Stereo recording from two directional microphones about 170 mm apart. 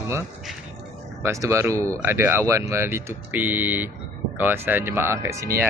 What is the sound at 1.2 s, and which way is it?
Speech, 15° right (ahead or behind).